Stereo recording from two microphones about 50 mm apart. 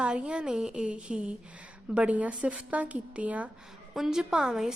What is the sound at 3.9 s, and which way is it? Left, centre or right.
Speech, centre.